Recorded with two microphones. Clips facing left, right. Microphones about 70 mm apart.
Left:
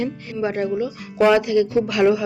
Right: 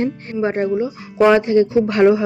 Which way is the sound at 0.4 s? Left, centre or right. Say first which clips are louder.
Right 3 dB; right.